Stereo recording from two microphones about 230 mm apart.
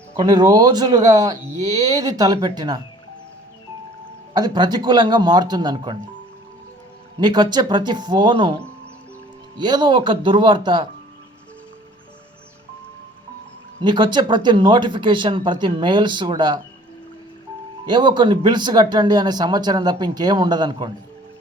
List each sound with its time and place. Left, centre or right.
0.1 s speech: centre
4.4 s speech: centre
7.2 s speech: centre
13.8 s speech: centre
17.8 s speech: centre